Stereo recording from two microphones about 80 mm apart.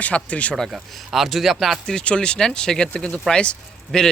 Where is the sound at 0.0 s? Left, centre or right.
Centre.